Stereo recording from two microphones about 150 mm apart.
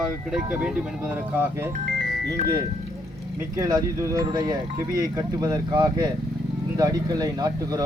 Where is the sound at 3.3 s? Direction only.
20° right (ahead or behind).